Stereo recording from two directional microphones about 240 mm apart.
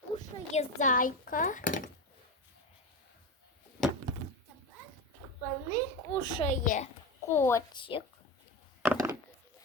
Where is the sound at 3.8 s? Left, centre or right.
Centre.